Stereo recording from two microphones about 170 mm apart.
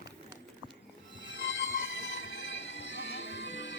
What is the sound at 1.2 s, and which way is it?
Train wheels squealing, 90° left.